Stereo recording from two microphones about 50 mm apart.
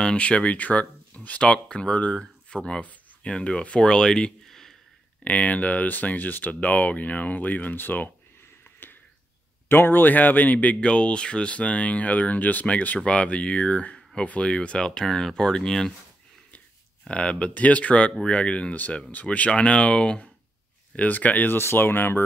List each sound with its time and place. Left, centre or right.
0.0 s speech: left
2.8 s a sound: left
3.3 s speech: centre
5.2 s speech: left
9.7 s speech: left; by 14.9 s centre
14.9 s speech: centre
17.1 s speech: left
21.5 s speech: left